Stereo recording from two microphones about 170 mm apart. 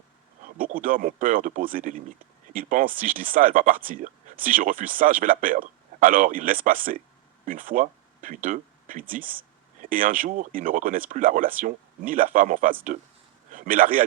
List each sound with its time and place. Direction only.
0.4 s a man's voice: 55° right (ahead or behind)